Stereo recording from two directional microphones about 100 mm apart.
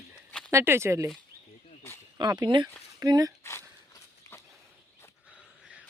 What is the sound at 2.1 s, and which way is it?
Speech, 45° right (ahead or behind).